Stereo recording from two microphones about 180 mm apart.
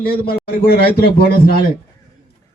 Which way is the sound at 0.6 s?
60° left (ahead or behind).